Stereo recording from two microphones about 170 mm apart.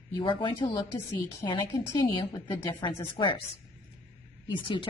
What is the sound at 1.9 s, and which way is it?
A woman's voice, 25° left (ahead or behind).